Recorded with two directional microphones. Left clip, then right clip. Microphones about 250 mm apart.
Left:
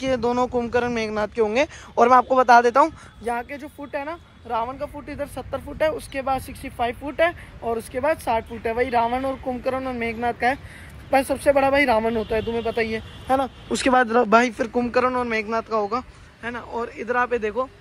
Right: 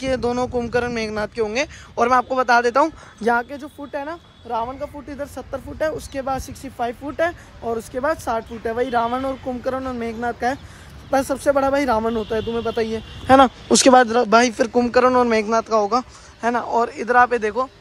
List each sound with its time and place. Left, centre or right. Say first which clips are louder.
0.0 s speech: even; centre
3.3 s speech: right 7 dB; centre
13.3 s speech: right 9 dB; right
13.7 s speech: right 6 dB; centre